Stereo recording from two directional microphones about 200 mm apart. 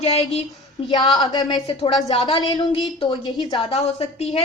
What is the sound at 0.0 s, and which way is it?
Speech, 30° left (ahead or behind).